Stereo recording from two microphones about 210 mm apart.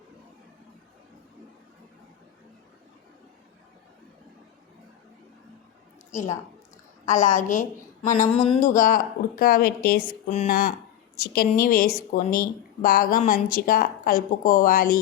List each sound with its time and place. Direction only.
6.1 s a woman's voice: 35° left (ahead or behind)
10.1 s a woman's voice: 30° left (ahead or behind)
10.5 s a woman's voice: 45° left (ahead or behind)